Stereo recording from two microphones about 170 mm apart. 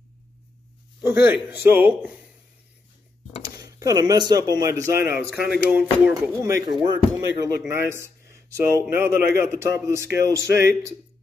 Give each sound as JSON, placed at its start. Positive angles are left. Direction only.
{"t": 1.0, "sound": "a man's voice", "side_deg": -10}
{"t": 3.5, "sound": "speech", "side_deg": -20}
{"t": 5.4, "sound": "a man's voice", "side_deg": -5}